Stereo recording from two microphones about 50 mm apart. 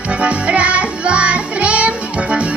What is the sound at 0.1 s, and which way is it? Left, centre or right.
Music, right.